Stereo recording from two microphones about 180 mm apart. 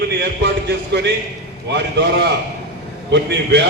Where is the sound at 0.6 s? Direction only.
70° right (ahead or behind).